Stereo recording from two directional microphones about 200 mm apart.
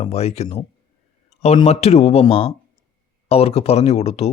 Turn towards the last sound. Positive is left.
turn(degrees=30)  # may be behind; listen again after turning